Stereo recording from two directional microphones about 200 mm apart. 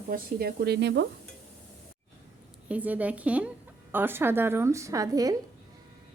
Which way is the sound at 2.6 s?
5° right (ahead or behind).